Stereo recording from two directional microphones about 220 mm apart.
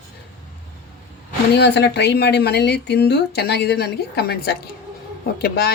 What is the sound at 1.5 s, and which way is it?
A woman's voice, 50° left (ahead or behind).